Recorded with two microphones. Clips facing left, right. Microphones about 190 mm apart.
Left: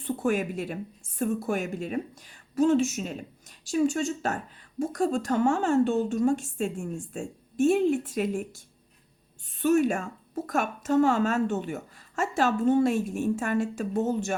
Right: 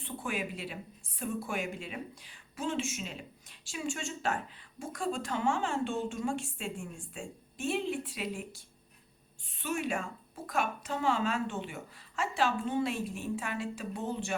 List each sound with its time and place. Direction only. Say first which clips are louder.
0.0 s speech: left 10 dB; 45° left (ahead or behind)